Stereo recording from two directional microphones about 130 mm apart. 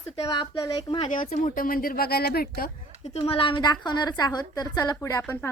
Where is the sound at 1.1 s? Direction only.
90° left.